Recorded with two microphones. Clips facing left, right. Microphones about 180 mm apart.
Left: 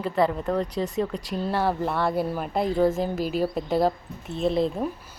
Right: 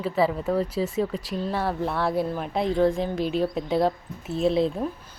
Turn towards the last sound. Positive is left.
turn(degrees=0)  # may be behind; listen again after turning